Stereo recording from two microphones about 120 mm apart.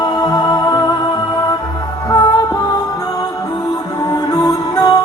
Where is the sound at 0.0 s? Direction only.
30° left (ahead or behind).